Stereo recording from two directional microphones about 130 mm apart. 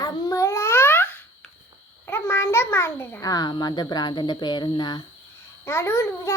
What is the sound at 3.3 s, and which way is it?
Speech, 35° left (ahead or behind).